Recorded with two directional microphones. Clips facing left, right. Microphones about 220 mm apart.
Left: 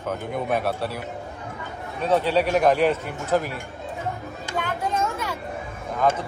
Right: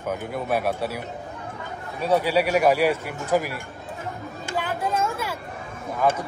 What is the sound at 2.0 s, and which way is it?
A man's voice, 10° right (ahead or behind).